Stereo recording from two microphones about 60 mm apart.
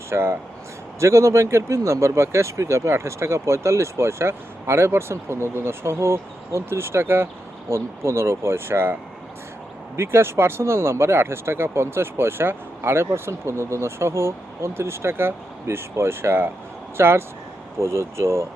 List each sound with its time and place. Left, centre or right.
0.1 s speech: right